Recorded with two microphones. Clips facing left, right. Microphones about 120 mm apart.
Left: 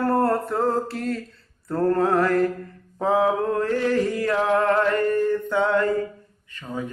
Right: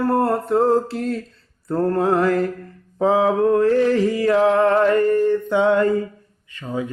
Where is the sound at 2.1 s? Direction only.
25° right (ahead or behind).